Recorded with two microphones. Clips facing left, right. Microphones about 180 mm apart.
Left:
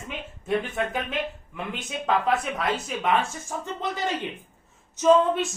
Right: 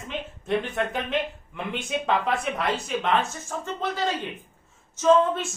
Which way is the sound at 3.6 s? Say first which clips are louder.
Right 2 dB; 15° left (ahead or behind).